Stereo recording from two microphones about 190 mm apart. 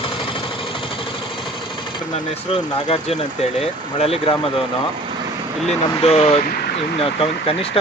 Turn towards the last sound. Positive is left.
turn(degrees=30)  # may be behind; listen again after turning